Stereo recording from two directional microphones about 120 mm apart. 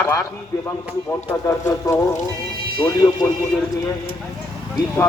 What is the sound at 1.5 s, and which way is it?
A man's voice, 30° left (ahead or behind).